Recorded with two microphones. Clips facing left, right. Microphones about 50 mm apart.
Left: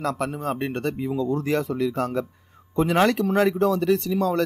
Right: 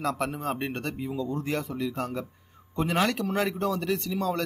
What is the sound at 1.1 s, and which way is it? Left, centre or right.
Speech, left.